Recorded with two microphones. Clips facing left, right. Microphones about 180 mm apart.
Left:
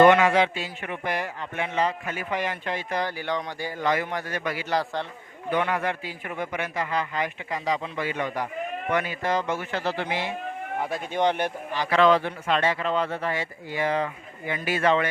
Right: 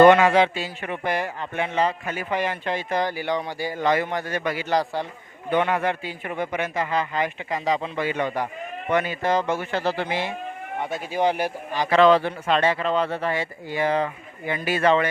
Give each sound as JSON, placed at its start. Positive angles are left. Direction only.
{"t": 0.0, "sound": "a man's voice", "side_deg": -35}
{"t": 3.8, "sound": "a man's voice", "side_deg": -25}
{"t": 10.8, "sound": "a man's voice", "side_deg": 0}
{"t": 11.8, "sound": "a man's voice", "side_deg": -30}